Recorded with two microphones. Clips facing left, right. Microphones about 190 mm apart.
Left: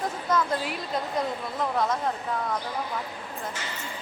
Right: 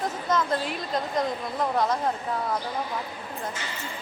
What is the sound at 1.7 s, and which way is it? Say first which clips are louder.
Speech: right 1 dB; centre (ahead or behind).